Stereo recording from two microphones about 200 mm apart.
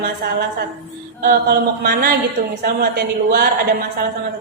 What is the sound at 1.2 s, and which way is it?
A woman's voice, 50° right (ahead or behind).